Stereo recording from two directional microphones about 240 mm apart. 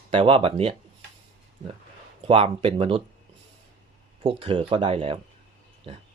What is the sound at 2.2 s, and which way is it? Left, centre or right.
Speech, right.